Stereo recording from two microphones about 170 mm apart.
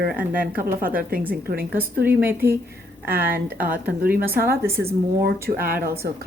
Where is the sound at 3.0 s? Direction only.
60° right (ahead or behind).